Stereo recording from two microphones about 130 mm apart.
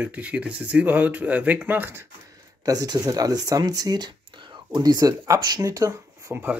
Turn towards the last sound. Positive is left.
turn(degrees=-15)  # may be behind; listen again after turning